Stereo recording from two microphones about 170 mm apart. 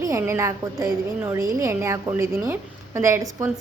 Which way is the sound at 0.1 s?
15° right (ahead or behind).